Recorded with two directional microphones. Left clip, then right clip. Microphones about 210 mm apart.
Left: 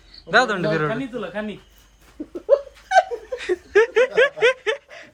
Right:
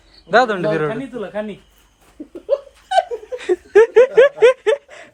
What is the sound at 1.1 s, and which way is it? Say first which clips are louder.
Speech: right 3 dB; 40° right (ahead or behind).